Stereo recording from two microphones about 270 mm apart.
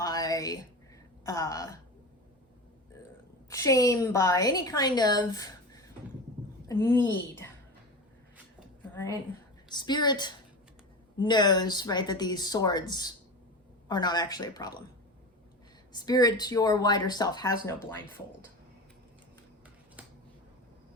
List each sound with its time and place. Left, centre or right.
0.0 s a sound: centre
1.2 s a woman's voice: centre
3.5 s a woman's voice: centre
9.6 s a woman's voice: centre
15.9 s a woman's voice: centre
20.0 s finger snapping: centre